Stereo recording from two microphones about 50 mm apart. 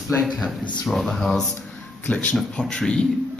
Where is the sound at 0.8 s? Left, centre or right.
Centre.